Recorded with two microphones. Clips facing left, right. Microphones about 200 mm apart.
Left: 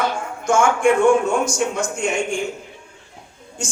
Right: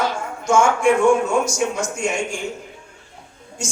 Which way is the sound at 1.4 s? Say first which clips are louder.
Even; 55° left (ahead or behind).